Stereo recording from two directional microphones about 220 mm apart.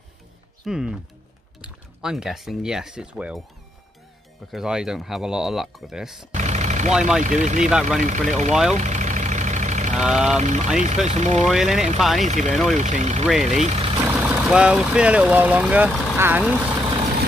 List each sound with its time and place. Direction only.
0.7 s speech: 5° right (ahead or behind)
4.5 s speech: centre (ahead or behind)
6.3 s vehicle: 30° right (ahead or behind)
6.9 s speech: 5° right (ahead or behind)
7.2 s speech: 35° right (ahead or behind)
8.7 s vehicle: 35° right (ahead or behind)
9.9 s speech: centre (ahead or behind)
10.3 s speech: 35° right (ahead or behind)
11.4 s speech: centre (ahead or behind)
12.3 s speech: 30° right (ahead or behind)
14.0 s speech: 10° right (ahead or behind)